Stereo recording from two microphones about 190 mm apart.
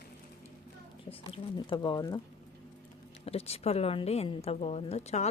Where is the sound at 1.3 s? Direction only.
25° left (ahead or behind).